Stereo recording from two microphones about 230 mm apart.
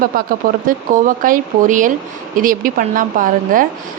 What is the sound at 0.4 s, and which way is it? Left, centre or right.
A woman's voice, right.